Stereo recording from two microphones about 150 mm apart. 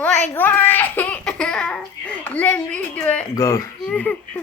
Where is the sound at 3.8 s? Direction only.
10° left (ahead or behind).